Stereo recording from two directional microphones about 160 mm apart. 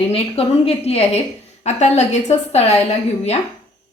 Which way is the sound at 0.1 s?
40° left (ahead or behind).